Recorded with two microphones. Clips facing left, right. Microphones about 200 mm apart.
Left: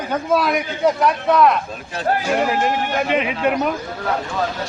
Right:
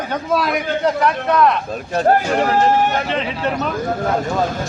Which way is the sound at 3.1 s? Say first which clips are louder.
Left 2 dB; 10° left (ahead or behind).